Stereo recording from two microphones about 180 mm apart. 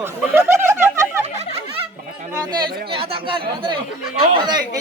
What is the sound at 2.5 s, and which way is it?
Speech, 25° right (ahead or behind).